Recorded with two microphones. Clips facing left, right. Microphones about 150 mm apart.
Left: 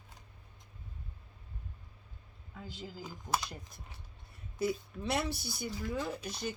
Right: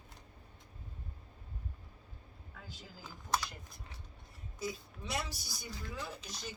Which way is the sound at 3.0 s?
15° left (ahead or behind).